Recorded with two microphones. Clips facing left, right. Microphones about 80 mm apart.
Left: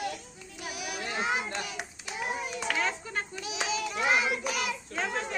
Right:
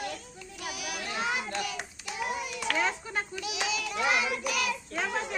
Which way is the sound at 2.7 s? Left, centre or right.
Centre.